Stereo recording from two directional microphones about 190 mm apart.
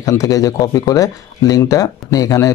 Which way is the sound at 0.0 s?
15° left (ahead or behind).